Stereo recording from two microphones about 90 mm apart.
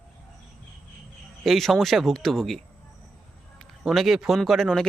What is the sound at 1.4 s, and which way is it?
A man's voice, centre (ahead or behind).